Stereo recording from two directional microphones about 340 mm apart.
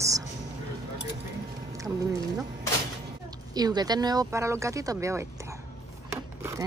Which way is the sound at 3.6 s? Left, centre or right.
Centre.